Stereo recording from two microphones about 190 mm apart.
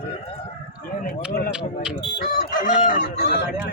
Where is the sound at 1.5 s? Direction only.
5° right (ahead or behind).